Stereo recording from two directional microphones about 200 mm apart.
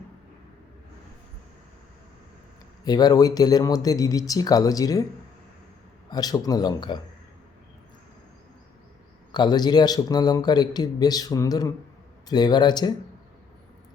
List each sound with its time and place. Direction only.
2.8 s a man's voice: 20° left (ahead or behind)
6.1 s a man's voice: 20° left (ahead or behind)
9.3 s a man's voice: 20° left (ahead or behind)